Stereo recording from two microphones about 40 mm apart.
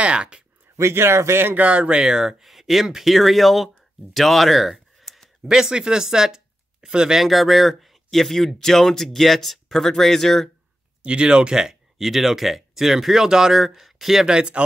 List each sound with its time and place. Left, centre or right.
0.0 s speech: right
0.9 s speech: right
1.6 s speech: right
2.2 s speech: centre
5.4 s speech: centre
7.2 s speech: centre
11.0 s speech: right
12.0 s speech: centre
14.2 s speech: centre